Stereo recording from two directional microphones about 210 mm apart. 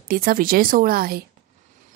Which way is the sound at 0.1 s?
45° right (ahead or behind).